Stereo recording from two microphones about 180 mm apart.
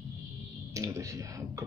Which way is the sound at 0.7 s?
15° right (ahead or behind).